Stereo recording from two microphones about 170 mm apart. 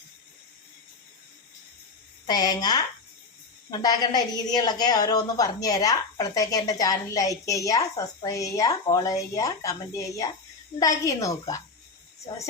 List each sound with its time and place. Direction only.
2.2 s a woman's voice: 25° left (ahead or behind)